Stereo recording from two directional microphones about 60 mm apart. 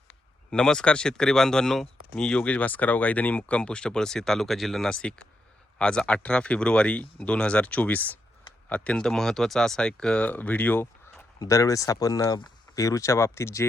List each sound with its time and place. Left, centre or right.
0.5 s speech: centre
2.2 s speech: left
9.0 s speech: centre
10.2 s speech: left
11.3 s speech: left